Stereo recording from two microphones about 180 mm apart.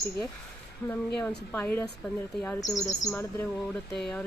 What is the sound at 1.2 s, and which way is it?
Speech, 10° left (ahead or behind).